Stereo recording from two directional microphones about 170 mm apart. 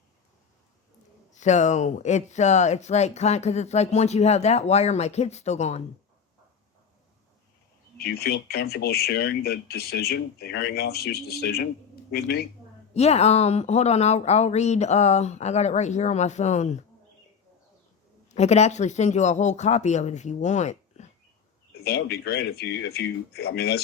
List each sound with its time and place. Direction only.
1.3 s speech: 45° left (ahead or behind)
7.9 s speech: 70° left (ahead or behind)
12.9 s speech: 40° left (ahead or behind)
18.3 s speech: 40° left (ahead or behind)
21.7 s speech: 70° left (ahead or behind)